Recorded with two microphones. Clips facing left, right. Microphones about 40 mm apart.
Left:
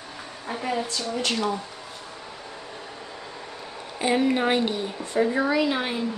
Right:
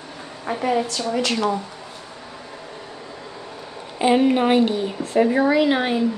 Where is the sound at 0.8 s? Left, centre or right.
Right.